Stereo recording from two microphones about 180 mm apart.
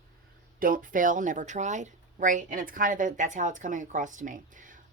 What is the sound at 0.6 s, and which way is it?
Speech, 50° right (ahead or behind).